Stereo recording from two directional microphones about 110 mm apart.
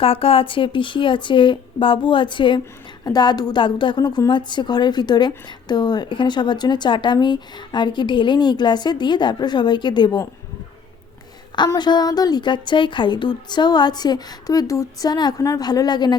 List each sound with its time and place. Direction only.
0.0 s a woman's voice: 60° left (ahead or behind); by 10.2 s 40° left (ahead or behind)
11.8 s a woman's voice: 40° left (ahead or behind)